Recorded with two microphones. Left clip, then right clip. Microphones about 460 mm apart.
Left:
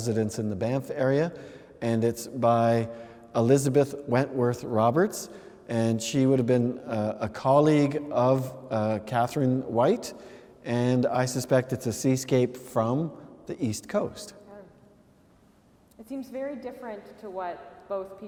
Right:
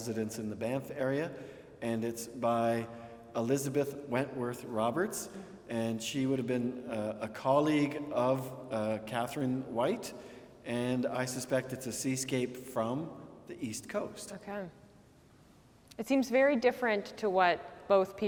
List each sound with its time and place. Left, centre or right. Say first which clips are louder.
0.0 s a man's voice: left 9 dB; left
16.0 s a woman's voice: right 8 dB; right